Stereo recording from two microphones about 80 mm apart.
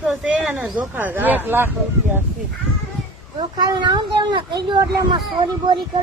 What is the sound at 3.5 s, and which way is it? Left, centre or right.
Speech, right.